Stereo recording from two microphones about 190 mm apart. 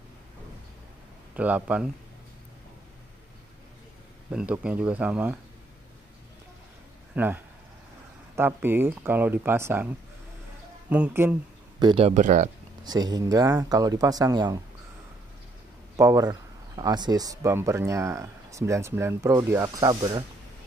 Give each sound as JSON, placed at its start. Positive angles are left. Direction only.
{"t": 1.3, "sound": "speech", "side_deg": -5}
{"t": 4.3, "sound": "speech", "side_deg": -5}
{"t": 7.2, "sound": "speech", "side_deg": -10}
{"t": 10.9, "sound": "speech", "side_deg": -10}
{"t": 11.8, "sound": "speech", "side_deg": -25}
{"t": 12.1, "sound": "speech", "side_deg": -40}
{"t": 12.8, "sound": "speech", "side_deg": -20}
{"t": 16.0, "sound": "speech", "side_deg": -20}